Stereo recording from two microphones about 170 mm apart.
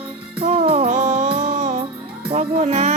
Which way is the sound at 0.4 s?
35° right (ahead or behind).